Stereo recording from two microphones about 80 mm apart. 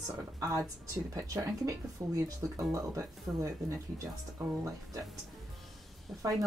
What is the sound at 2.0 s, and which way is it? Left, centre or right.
Speech, right.